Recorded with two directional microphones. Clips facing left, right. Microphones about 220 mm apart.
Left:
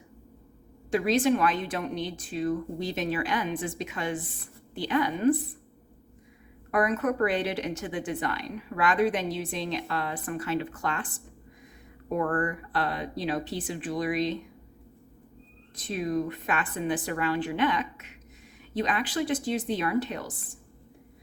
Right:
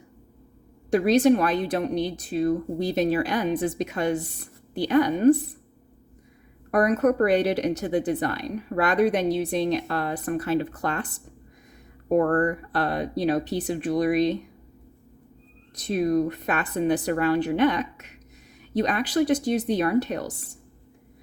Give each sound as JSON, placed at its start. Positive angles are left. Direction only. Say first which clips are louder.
{"t": 0.9, "sound": "a woman's voice", "louder": "right 5 dB", "side_deg": -40}
{"t": 6.7, "sound": "a woman's voice", "louder": "right 6 dB", "side_deg": -40}
{"t": 15.7, "sound": "a woman's voice", "louder": "right 6 dB", "side_deg": -40}